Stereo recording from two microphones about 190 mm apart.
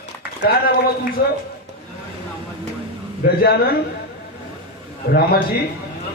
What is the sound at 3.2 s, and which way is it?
Speech, 55° left (ahead or behind).